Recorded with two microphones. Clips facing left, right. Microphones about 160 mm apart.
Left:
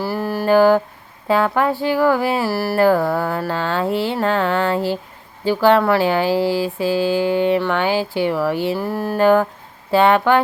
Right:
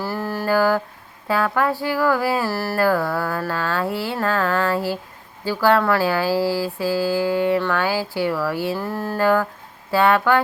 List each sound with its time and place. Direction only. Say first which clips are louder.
0.0 s mantra: left 4 dB; 15° left (ahead or behind)
1.3 s speech: left 3 dB; 25° left (ahead or behind)
2.5 s a sound: left 4 dB; 10° left (ahead or behind)
2.7 s speech: left 5 dB; 25° left (ahead or behind)
9.1 s speech: left 5 dB; 25° left (ahead or behind)